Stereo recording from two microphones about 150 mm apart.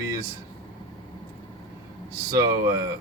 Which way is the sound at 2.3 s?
25° right (ahead or behind).